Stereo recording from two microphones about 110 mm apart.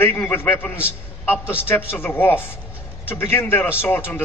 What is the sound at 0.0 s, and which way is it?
A man's voice, 20° left (ahead or behind).